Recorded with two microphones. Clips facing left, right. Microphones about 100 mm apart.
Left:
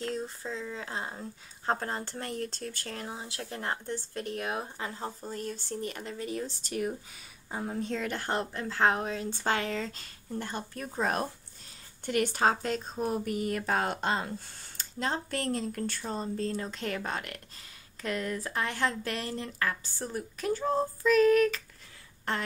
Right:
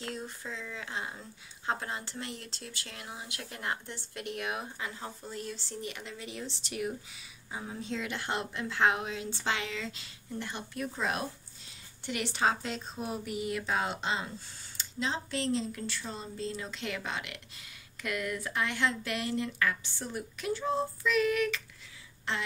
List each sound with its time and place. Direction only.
0.1 s speech: 35° left (ahead or behind)
18.0 s speech: 35° left (ahead or behind)